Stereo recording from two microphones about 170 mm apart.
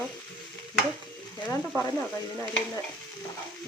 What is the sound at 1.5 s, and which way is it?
Speech, 10° left (ahead or behind).